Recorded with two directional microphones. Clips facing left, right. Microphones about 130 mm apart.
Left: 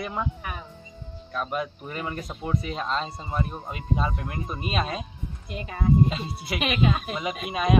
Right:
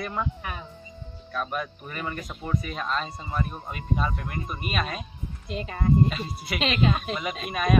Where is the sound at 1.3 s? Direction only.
20° left (ahead or behind).